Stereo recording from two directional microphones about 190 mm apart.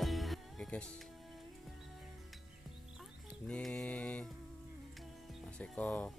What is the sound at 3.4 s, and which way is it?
Mantra, 5° left (ahead or behind).